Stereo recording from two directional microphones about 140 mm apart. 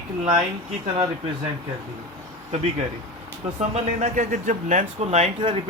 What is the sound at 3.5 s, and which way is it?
Speech, 55° right (ahead or behind).